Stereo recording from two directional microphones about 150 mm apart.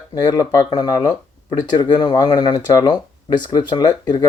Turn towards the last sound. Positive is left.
turn(degrees=25)  # may be behind; listen again after turning